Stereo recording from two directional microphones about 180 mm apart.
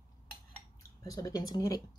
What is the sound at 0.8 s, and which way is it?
Speech, 20° left (ahead or behind).